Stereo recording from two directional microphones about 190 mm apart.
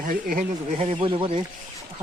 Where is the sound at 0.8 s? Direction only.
30° right (ahead or behind).